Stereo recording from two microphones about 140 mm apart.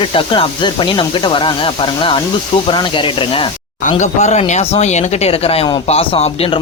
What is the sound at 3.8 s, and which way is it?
A man's voice, 55° left (ahead or behind).